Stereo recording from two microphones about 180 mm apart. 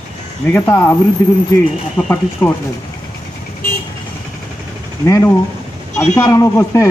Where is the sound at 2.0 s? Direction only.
10° left (ahead or behind).